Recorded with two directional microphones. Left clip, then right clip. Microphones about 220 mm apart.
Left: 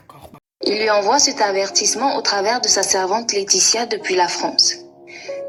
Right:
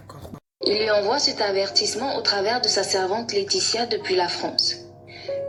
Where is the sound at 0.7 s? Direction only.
5° left (ahead or behind).